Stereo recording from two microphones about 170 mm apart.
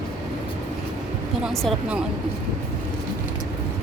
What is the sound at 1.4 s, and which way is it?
Speech, centre (ahead or behind).